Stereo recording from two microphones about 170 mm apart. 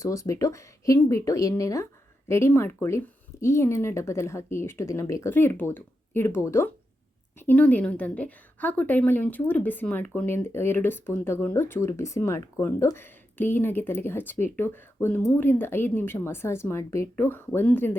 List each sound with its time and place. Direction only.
0.0 s speech: 20° left (ahead or behind)